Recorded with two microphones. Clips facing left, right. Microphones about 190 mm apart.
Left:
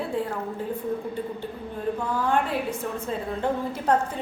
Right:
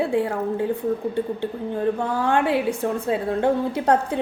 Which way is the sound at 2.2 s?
75° right (ahead or behind).